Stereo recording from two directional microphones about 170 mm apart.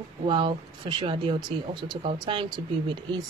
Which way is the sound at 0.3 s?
30° right (ahead or behind).